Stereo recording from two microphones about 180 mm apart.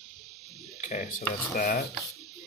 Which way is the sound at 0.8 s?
45° left (ahead or behind).